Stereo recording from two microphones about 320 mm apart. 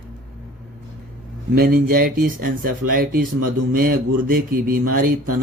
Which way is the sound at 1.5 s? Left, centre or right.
Right.